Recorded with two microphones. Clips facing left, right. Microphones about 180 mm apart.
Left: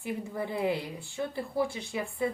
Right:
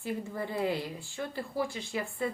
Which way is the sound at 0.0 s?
15° left (ahead or behind).